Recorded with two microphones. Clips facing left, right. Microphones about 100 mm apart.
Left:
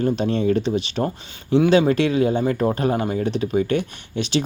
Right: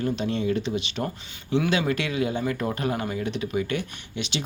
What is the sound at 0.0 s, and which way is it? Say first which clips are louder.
Speech: left 6 dB; 35° left (ahead or behind).